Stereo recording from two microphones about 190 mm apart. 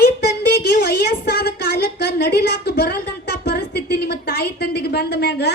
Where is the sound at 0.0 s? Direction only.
60° left (ahead or behind).